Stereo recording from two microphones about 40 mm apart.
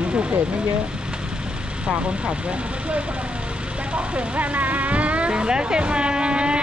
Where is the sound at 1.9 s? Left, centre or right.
Right.